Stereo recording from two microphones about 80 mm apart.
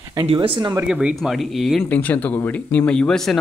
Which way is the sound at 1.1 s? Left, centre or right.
Centre.